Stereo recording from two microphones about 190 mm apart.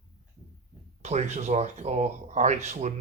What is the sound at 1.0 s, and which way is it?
Speech, 35° right (ahead or behind).